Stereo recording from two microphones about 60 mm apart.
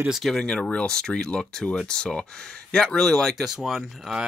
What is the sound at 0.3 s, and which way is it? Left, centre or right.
Speech, centre.